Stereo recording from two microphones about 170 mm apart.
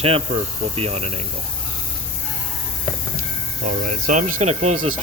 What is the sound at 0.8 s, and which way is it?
Speech, 35° right (ahead or behind).